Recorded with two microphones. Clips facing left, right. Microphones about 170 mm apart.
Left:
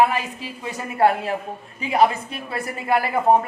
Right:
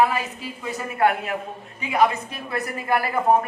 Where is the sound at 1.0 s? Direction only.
30° left (ahead or behind).